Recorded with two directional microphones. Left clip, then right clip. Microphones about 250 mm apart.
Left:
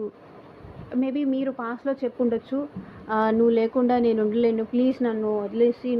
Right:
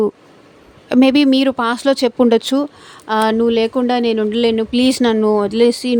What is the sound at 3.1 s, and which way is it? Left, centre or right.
Speech, right.